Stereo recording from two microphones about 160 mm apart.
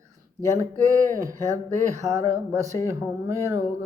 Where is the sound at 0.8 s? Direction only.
20° right (ahead or behind).